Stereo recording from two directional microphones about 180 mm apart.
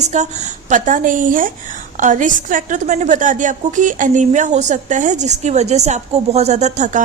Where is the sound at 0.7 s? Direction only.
45° right (ahead or behind).